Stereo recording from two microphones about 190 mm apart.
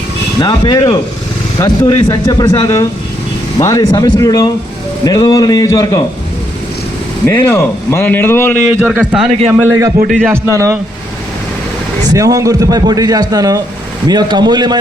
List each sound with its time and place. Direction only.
0.4 s speech: 25° left (ahead or behind)
7.3 s speech: 15° left (ahead or behind)
9.0 s a man's voice: 5° right (ahead or behind)
9.5 s a man's voice: 15° right (ahead or behind)
12.1 s a man's voice: 20° right (ahead or behind)